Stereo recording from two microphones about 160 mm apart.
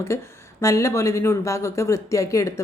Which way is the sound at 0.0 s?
15° left (ahead or behind).